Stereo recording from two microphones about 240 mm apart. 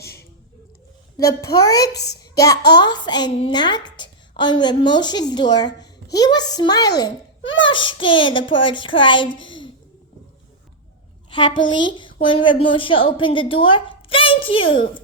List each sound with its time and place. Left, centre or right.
1.1 s a child's voice: centre
11.6 s a woman's voice: centre